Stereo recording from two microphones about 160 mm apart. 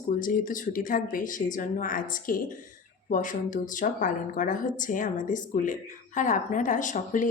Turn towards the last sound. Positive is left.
turn(degrees=55)  # may be behind; listen again after turning